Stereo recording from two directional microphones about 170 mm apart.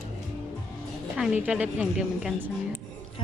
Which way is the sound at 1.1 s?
5° right (ahead or behind).